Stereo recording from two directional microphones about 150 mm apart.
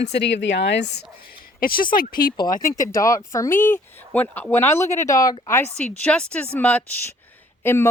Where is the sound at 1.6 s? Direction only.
75° left (ahead or behind).